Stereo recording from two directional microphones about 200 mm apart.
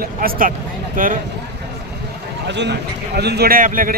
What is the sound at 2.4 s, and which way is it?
Speech, 60° right (ahead or behind).